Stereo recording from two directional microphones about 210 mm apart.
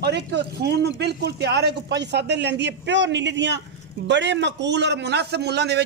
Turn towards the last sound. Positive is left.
turn(degrees=-50)  # may be behind; listen again after turning